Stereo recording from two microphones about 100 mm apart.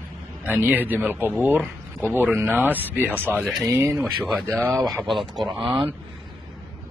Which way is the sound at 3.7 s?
30° right (ahead or behind).